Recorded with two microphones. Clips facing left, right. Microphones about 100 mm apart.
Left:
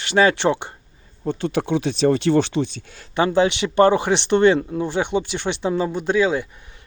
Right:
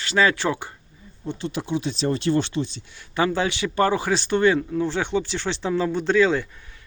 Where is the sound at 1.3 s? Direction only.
60° left (ahead or behind).